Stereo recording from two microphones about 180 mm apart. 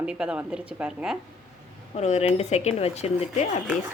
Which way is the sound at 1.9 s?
40° left (ahead or behind).